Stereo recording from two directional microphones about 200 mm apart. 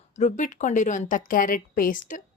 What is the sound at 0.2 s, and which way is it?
A woman's voice, 40° left (ahead or behind).